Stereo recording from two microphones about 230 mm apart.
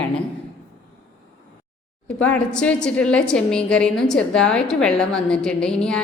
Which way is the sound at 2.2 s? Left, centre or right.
Centre.